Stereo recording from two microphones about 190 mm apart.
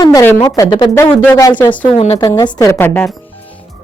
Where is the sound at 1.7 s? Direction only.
35° left (ahead or behind).